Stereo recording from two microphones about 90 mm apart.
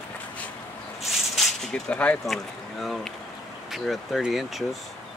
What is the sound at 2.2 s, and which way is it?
Speech, centre (ahead or behind).